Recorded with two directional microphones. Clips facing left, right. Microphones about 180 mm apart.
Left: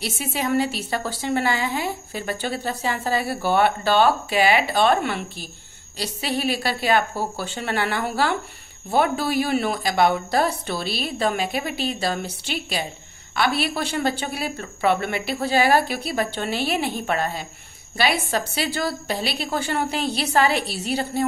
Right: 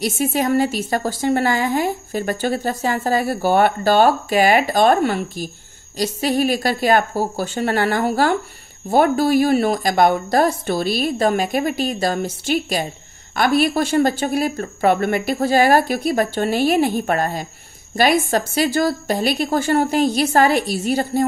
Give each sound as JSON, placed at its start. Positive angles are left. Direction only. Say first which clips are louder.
{"t": 0.2, "sound": "a woman's voice", "louder": "right 4 dB", "side_deg": -50}